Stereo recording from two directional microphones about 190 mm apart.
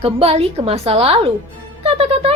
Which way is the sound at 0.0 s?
30° right (ahead or behind).